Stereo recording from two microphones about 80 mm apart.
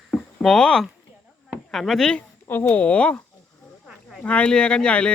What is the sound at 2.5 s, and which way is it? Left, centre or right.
Speech, left.